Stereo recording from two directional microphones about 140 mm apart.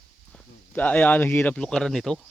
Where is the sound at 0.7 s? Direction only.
10° left (ahead or behind).